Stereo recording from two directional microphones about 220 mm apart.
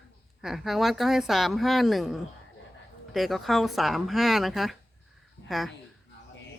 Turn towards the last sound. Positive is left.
turn(degrees=0)  # may be behind; listen again after turning